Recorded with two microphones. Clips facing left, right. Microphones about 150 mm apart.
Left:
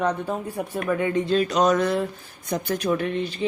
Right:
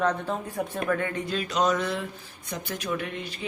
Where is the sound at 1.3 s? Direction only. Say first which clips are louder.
Left 4 dB; 40° left (ahead or behind).